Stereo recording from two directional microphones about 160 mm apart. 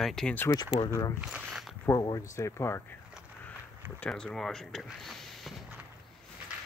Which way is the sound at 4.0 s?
5° left (ahead or behind).